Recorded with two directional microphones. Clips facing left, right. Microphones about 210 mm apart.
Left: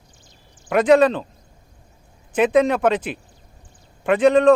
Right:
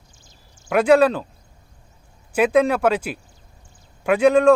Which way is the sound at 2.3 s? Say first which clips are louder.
Even; 5° right (ahead or behind).